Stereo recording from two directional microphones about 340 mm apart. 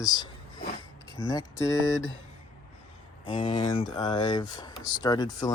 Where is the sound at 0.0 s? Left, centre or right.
Centre.